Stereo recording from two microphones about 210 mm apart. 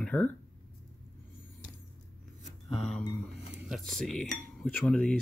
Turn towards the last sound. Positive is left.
turn(degrees=5)  # may be behind; listen again after turning